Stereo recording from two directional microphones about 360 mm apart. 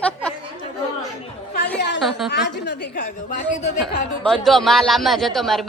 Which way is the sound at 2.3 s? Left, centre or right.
Left.